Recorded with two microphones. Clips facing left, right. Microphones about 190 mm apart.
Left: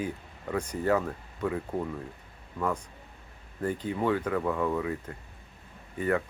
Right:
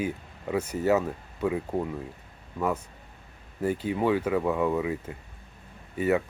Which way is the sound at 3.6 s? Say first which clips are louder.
Right 3 dB; 10° right (ahead or behind).